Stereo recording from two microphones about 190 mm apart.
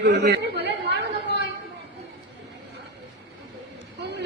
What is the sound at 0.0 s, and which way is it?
Chatter, 60° right (ahead or behind).